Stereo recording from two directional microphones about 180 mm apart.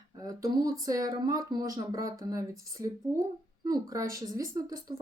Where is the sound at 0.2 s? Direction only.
20° right (ahead or behind).